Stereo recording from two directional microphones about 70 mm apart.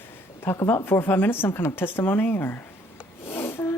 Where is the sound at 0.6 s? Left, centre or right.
Left.